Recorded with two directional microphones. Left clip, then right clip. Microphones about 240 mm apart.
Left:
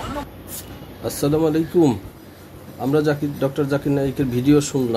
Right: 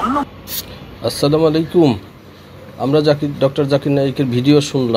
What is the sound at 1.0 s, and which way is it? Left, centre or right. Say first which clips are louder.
Speech: right 6 dB; centre.